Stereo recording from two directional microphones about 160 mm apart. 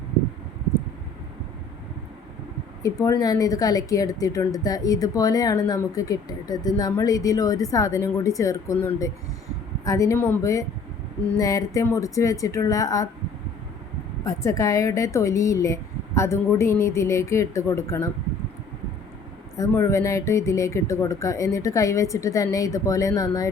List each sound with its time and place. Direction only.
2.8 s speech: 20° left (ahead or behind)
14.3 s speech: 20° left (ahead or behind)
19.5 s speech: 20° left (ahead or behind)